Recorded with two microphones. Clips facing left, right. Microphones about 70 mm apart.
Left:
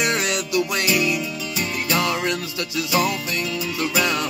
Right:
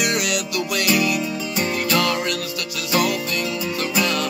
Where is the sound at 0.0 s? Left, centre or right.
Left.